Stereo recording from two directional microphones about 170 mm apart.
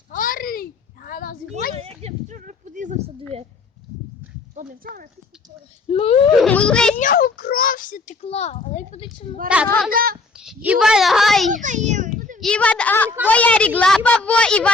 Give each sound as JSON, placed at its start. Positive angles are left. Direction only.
{"t": 0.1, "sound": "a sound", "side_deg": 55}
{"t": 1.7, "sound": "a sound", "side_deg": -35}
{"t": 4.5, "sound": "clip-clop", "side_deg": -55}
{"t": 5.9, "sound": "speech", "side_deg": 35}
{"t": 6.4, "sound": "a child's voice", "side_deg": 5}
{"t": 6.9, "sound": "a child's voice", "side_deg": 55}
{"t": 9.5, "sound": "speech", "side_deg": -5}
{"t": 9.9, "sound": "child singing", "side_deg": -60}
{"t": 10.3, "sound": "a child's voice", "side_deg": -5}
{"t": 11.5, "sound": "a sound", "side_deg": -45}
{"t": 12.4, "sound": "a woman's voice", "side_deg": 5}